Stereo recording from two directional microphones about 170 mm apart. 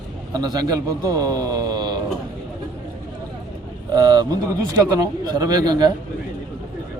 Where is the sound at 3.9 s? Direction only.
25° right (ahead or behind).